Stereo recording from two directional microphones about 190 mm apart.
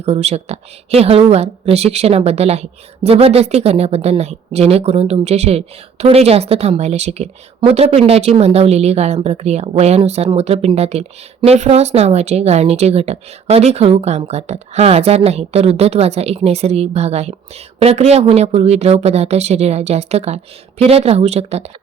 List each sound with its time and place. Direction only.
0.0 s speech: 35° right (ahead or behind)